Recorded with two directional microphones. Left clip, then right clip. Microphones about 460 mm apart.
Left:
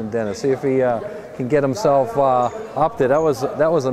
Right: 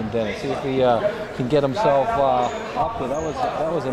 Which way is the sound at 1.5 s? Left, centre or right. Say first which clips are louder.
Left 1 dB; left.